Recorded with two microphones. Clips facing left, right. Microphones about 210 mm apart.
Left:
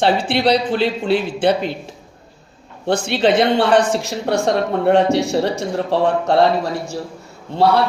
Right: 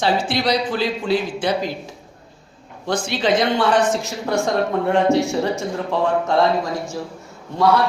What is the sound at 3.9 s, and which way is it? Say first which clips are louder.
Speech: left 3 dB; 30° left (ahead or behind).